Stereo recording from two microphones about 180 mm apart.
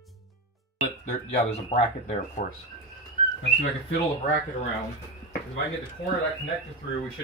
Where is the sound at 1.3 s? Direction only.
40° left (ahead or behind).